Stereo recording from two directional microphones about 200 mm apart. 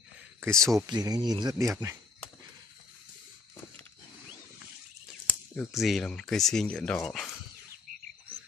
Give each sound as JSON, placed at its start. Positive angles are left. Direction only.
{"t": 0.4, "sound": "speech", "side_deg": -15}
{"t": 5.6, "sound": "speech", "side_deg": 0}